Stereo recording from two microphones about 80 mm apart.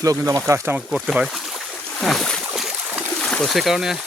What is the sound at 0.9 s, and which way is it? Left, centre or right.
Speech, centre.